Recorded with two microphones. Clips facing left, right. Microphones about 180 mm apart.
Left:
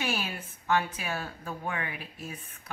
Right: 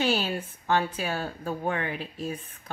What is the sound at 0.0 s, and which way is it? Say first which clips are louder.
Speech: right 7 dB; 35° right (ahead or behind).